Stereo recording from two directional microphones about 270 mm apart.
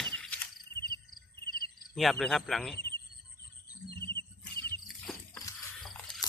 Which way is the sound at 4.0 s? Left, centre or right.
Centre.